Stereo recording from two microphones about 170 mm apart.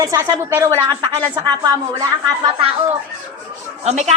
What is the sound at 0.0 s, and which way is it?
Speech, 20° right (ahead or behind).